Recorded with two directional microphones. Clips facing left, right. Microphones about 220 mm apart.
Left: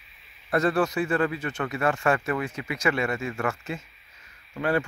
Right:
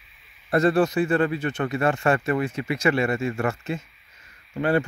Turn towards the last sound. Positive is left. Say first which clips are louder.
# right 3 dB
turn(degrees=-25)  # may be behind; listen again after turning